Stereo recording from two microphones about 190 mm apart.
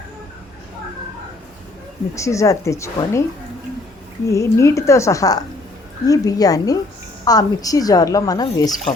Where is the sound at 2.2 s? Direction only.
15° left (ahead or behind).